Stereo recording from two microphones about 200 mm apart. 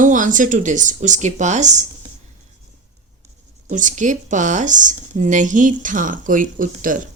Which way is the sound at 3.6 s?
40° right (ahead or behind).